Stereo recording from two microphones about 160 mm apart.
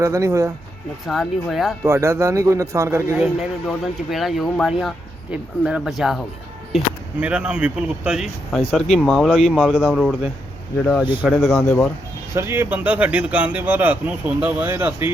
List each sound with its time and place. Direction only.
0.0 s speech: 20° right (ahead or behind)
1.0 s speech: centre (ahead or behind)
1.8 s speech: 15° right (ahead or behind)
3.3 s speech: centre (ahead or behind)
12.3 s speech: 15° right (ahead or behind)